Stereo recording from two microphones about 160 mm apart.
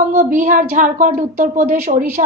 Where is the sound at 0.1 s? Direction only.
50° right (ahead or behind).